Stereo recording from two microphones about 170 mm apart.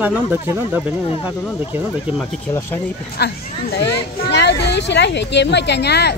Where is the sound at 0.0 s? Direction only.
10° right (ahead or behind).